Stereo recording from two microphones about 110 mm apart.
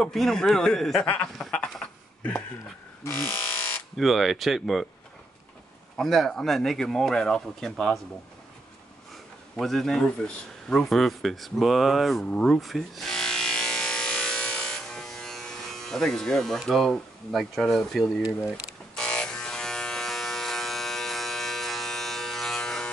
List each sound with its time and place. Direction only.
0.0 s speech: 5° left (ahead or behind)
1.0 s a sound: 15° left (ahead or behind)
1.4 s sheep: 5° left (ahead or behind)
3.0 s a sound: 20° left (ahead or behind)
3.9 s speech: centre (ahead or behind)
5.9 s speech: centre (ahead or behind)
9.1 s speech: centre (ahead or behind)
18.9 s electric shaver: 5° left (ahead or behind)